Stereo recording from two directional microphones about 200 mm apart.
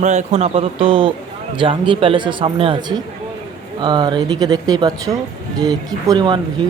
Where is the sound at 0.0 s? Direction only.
35° right (ahead or behind).